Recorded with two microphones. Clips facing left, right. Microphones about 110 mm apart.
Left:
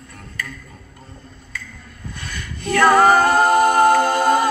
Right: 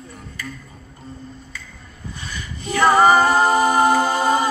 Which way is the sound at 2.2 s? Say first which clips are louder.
Left 1 dB; 60° left (ahead or behind).